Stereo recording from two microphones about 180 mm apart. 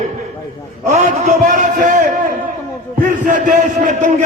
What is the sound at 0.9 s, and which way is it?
A man's voice, 40° right (ahead or behind).